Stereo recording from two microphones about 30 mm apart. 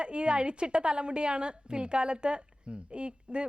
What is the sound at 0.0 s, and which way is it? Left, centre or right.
A woman's voice, right.